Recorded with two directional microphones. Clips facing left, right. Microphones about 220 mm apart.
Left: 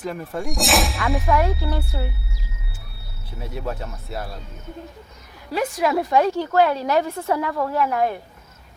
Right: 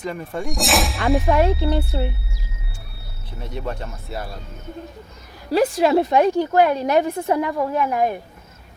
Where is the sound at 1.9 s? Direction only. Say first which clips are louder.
Right 5 dB; 25° right (ahead or behind).